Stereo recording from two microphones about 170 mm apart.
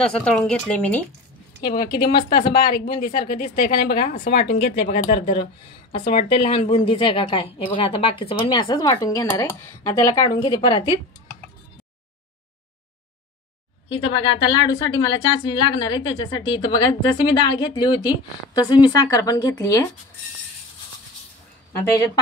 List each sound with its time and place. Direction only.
0.0 s speech: 5° left (ahead or behind)
1.6 s speech: 65° left (ahead or behind)
5.2 s a woman's voice: 35° left (ahead or behind)
13.8 s a woman's voice: 30° left (ahead or behind)